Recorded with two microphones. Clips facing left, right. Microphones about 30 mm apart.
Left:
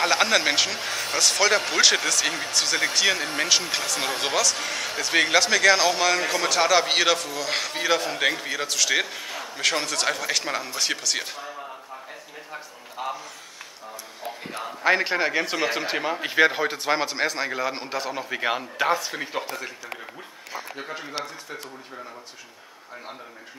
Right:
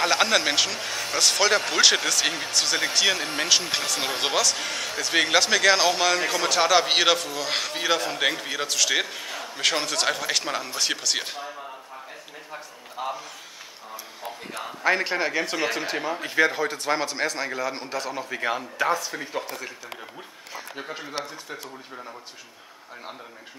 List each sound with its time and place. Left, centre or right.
0.0 s speech: centre
1.2 s speech: centre
12.5 s a man's voice: centre
14.8 s a man's voice: centre
15.9 s a man's voice: left